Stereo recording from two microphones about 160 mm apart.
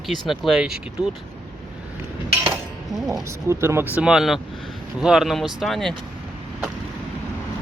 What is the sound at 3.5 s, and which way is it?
Speech, 15° right (ahead or behind).